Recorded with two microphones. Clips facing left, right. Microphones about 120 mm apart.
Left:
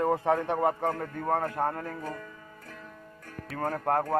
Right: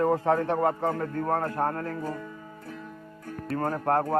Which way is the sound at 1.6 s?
10° left (ahead or behind).